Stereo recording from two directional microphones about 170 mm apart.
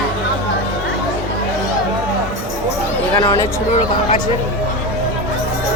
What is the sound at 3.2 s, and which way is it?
Speech, 25° left (ahead or behind).